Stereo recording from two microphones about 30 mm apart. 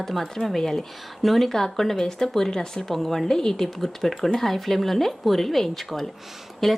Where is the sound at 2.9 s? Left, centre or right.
Centre.